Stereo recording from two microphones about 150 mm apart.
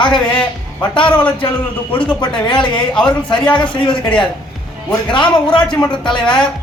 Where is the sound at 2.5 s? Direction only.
30° left (ahead or behind).